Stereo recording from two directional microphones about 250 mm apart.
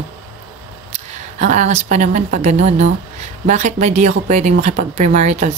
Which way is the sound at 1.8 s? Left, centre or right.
Right.